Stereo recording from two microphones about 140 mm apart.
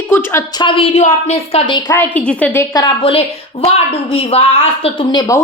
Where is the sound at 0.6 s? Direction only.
35° left (ahead or behind).